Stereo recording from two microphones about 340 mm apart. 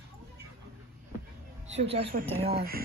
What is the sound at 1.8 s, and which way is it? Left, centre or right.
A woman's voice, centre.